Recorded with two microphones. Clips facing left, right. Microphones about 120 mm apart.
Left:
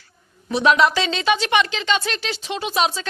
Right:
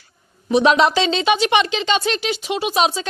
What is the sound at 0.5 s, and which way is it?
Speech, 20° right (ahead or behind).